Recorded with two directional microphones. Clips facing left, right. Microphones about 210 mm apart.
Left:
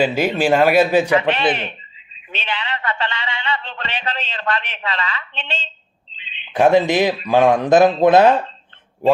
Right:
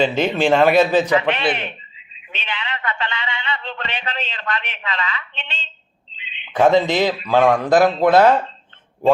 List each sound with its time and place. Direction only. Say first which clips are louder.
0.0 s speech: even; 10° left (ahead or behind)
1.3 s speech: left 2 dB; 35° left (ahead or behind)
6.1 s a sound: right 1 dB; 30° left (ahead or behind)
6.6 s speech: left 1 dB; 15° left (ahead or behind)